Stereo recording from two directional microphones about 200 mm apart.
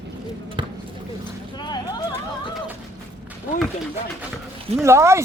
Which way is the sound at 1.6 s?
20° left (ahead or behind).